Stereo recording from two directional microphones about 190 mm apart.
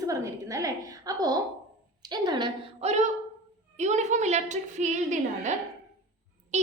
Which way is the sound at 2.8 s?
35° right (ahead or behind).